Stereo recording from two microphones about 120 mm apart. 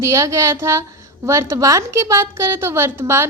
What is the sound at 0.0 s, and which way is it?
A woman's voice, 25° right (ahead or behind).